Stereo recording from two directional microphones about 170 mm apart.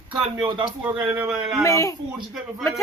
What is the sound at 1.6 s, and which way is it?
Speech, 20° left (ahead or behind).